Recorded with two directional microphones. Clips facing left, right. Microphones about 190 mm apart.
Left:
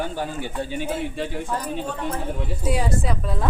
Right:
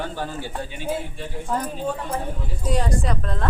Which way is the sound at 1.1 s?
80° left.